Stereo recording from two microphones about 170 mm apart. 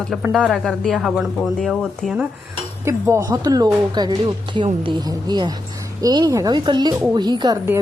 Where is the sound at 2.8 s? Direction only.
15° right (ahead or behind).